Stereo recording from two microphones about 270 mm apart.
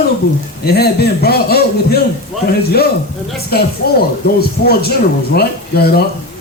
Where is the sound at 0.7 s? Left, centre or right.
Left.